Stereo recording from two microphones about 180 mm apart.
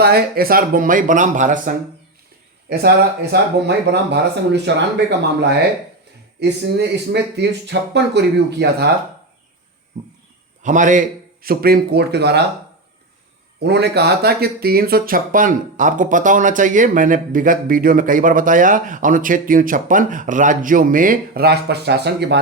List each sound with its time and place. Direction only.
0.0 s speech: 60° right (ahead or behind)
2.6 s speech: 60° right (ahead or behind)
3.7 s speech: 70° right (ahead or behind)
10.6 s a man's voice: 45° right (ahead or behind)
11.4 s speech: 55° right (ahead or behind)
13.6 s speech: 70° right (ahead or behind)